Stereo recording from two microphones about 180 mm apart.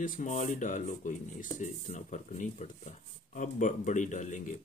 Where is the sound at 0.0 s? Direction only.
45° left (ahead or behind).